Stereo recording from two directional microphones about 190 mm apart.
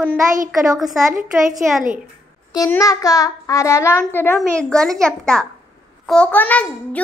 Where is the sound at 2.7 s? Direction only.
15° left (ahead or behind).